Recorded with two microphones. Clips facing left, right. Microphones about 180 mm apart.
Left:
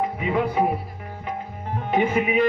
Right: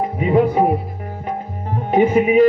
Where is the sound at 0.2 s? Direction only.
40° right (ahead or behind).